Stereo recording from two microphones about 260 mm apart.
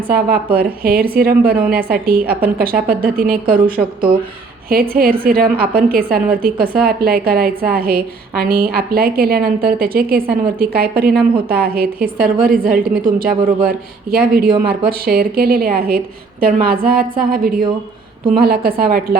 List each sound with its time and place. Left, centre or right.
0.1 s a woman's voice: right